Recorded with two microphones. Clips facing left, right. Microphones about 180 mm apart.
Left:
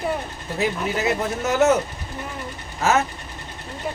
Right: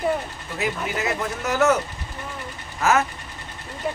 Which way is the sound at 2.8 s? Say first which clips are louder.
Even; 25° left (ahead or behind).